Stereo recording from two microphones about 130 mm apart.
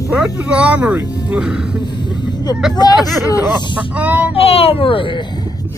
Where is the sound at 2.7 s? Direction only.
30° left (ahead or behind).